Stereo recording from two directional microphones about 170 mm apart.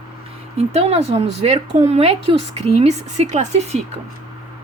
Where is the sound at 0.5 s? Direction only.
40° right (ahead or behind).